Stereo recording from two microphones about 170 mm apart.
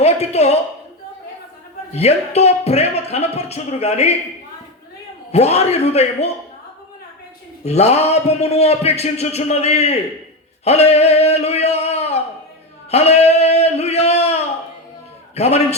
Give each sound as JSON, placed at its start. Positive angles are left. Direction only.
{"t": 0.0, "sound": "a sound", "side_deg": 40}
{"t": 1.9, "sound": "a man's voice", "side_deg": 40}
{"t": 5.3, "sound": "a man's voice", "side_deg": 40}
{"t": 7.6, "sound": "a man's voice", "side_deg": 40}
{"t": 10.6, "sound": "a sound", "side_deg": 40}
{"t": 15.4, "sound": "a man's voice", "side_deg": 40}